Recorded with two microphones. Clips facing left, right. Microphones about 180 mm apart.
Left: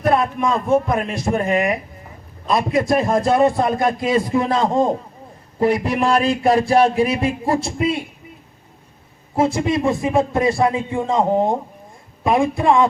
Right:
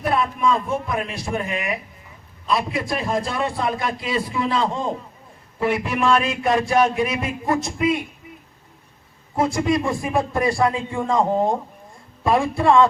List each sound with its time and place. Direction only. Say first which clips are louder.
0.0 s a man's voice: left 3 dB; 45° left (ahead or behind); by 8.0 s 30° left (ahead or behind)
9.3 s a man's voice: left 2 dB; 25° left (ahead or behind)